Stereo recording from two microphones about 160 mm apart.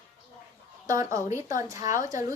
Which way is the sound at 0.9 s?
20° right (ahead or behind).